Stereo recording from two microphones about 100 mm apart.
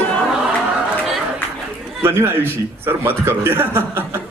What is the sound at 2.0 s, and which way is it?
A man's voice, 25° right (ahead or behind).